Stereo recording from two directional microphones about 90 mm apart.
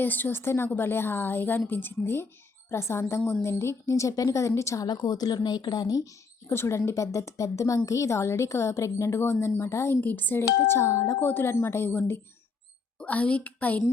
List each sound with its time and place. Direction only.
0.0 s a woman's voice: 20° left (ahead or behind)
4.9 s speech: 45° left (ahead or behind)
6.5 s a woman's voice: 30° left (ahead or behind)
13.0 s a woman's voice: 15° left (ahead or behind)